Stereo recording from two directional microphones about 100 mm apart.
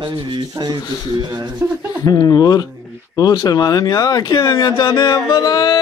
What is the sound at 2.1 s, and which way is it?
Speech, 40° left (ahead or behind).